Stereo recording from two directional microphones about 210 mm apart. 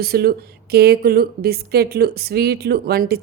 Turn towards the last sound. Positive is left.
turn(degrees=-50)  # may be behind; listen again after turning